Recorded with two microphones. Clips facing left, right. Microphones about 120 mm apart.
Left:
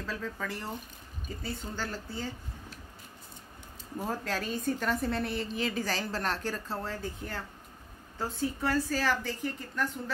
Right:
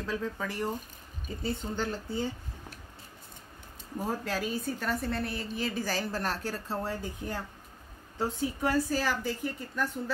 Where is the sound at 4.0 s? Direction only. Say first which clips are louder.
Right 1 dB; 10° right (ahead or behind).